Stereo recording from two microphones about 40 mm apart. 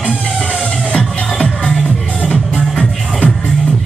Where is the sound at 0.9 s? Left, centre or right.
Left.